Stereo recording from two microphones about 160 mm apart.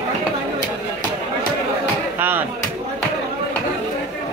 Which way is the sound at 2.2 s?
10° right (ahead or behind).